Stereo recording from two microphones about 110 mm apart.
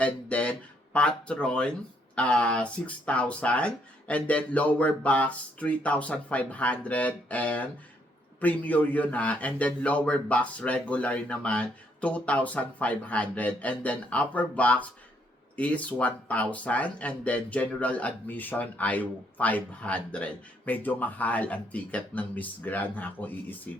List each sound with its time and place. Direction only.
0.0 s speech: 10° left (ahead or behind)